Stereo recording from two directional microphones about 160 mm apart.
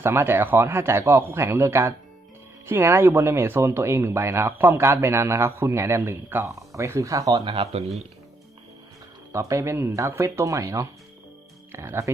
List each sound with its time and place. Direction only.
0.0 s speech: 15° right (ahead or behind); by 7.9 s 40° right (ahead or behind)
9.3 s speech: 20° right (ahead or behind)